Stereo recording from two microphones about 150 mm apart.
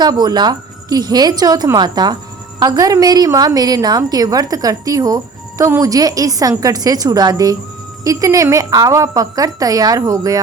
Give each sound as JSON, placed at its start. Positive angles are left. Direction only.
{"t": 0.0, "sound": "a woman's voice", "side_deg": -25}